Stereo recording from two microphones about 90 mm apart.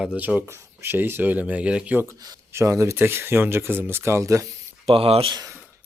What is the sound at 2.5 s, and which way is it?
A man's voice, 30° right (ahead or behind).